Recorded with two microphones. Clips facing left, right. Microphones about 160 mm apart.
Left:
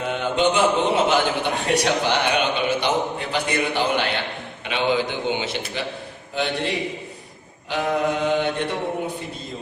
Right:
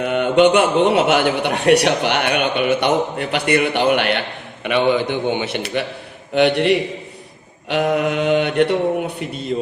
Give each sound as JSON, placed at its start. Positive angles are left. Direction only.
{"t": 0.0, "sound": "a man's voice", "side_deg": -65}